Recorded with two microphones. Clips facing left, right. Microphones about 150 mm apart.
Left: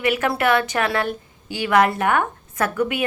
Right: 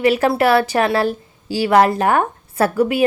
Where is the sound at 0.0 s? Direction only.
35° right (ahead or behind).